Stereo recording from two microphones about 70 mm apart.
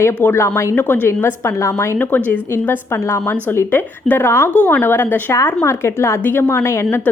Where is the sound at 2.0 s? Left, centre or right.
Left.